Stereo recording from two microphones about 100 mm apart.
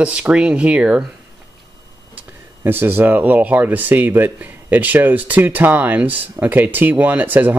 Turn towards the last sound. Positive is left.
turn(degrees=-20)  # may be behind; listen again after turning